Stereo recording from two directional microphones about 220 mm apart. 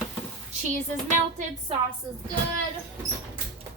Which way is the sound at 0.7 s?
35° right (ahead or behind).